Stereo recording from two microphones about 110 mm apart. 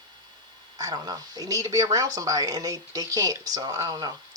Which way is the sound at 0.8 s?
35° right (ahead or behind).